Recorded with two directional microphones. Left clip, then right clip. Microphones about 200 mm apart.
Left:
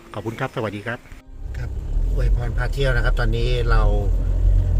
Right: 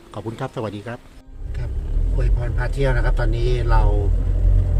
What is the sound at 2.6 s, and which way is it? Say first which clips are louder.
Speech: even; 15° left (ahead or behind).